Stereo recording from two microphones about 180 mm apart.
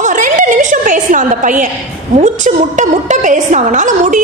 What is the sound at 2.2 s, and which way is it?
A woman's voice, 45° right (ahead or behind).